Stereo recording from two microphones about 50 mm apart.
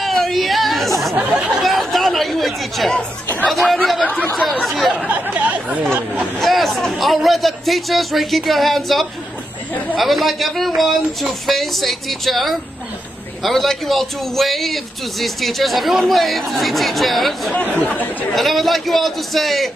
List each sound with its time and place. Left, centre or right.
0.0 s a sound: centre
1.1 s speech: right
1.6 s a man's voice: centre
4.0 s speech: left
4.5 s a man's voice: centre
5.0 s speech: right
6.4 s a man's voice: centre
17.6 s speech: left
18.3 s a man's voice: centre